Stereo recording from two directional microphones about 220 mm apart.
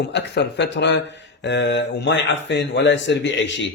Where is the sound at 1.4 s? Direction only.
55° left (ahead or behind).